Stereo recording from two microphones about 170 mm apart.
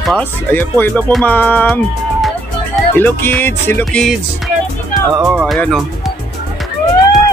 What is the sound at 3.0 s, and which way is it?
Music, 10° left (ahead or behind).